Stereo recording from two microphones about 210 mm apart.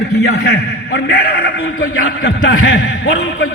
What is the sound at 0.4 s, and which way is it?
A man's voice, 50° left (ahead or behind).